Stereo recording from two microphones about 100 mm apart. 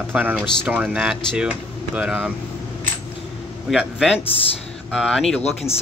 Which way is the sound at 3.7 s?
5° right (ahead or behind).